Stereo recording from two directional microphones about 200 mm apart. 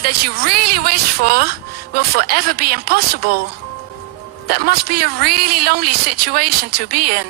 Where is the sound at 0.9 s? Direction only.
50° right (ahead or behind).